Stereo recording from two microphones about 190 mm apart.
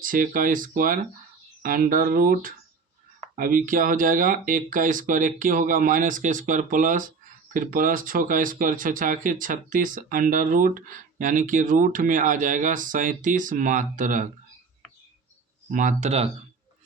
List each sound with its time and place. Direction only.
0.0 s speech: 45° right (ahead or behind)
15.7 s speech: 40° right (ahead or behind)